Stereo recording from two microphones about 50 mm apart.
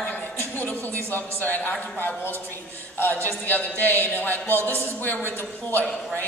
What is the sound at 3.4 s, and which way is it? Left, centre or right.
A woman's voice, left.